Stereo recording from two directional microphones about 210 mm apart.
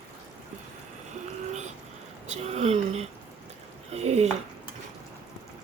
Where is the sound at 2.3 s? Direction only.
30° right (ahead or behind).